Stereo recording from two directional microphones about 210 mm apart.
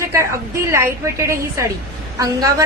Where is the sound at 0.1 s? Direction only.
15° right (ahead or behind).